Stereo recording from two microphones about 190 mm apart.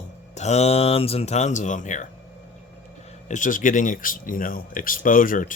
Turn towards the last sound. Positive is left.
turn(degrees=45)  # may be behind; listen again after turning